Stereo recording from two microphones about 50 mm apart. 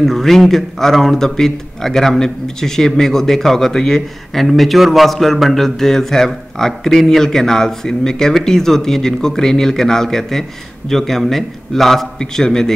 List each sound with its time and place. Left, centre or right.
0.0 s a man's voice: centre